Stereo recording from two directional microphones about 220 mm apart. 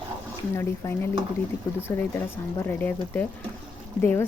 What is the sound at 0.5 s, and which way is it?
Speech, 10° left (ahead or behind).